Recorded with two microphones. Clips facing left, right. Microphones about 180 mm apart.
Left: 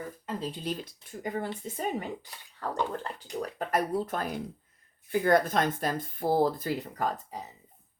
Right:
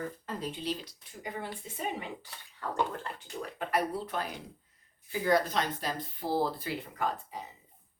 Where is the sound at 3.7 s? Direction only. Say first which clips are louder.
Left 3 dB; 45° left (ahead or behind).